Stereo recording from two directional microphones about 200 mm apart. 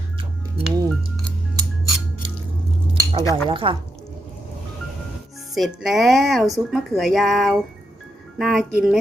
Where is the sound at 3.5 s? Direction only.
25° right (ahead or behind).